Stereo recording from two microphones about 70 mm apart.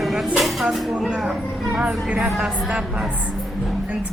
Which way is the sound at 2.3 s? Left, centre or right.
Centre.